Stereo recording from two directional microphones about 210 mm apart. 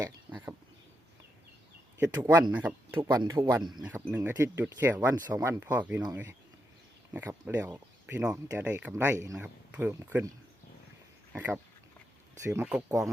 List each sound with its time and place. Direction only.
0.0 s a sound: 10° right (ahead or behind)
2.1 s speech: 15° right (ahead or behind)
3.8 s speech: 5° right (ahead or behind)
11.3 s speech: 10° right (ahead or behind)